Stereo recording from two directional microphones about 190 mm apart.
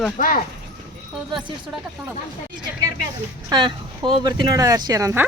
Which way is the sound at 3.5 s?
25° right (ahead or behind).